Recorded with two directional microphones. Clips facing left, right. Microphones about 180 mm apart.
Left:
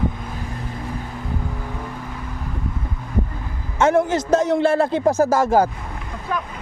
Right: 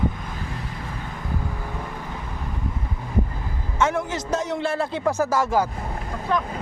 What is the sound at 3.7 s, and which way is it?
A man's voice, 50° left (ahead or behind).